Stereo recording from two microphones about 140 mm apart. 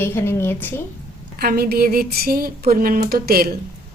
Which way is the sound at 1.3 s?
90° right.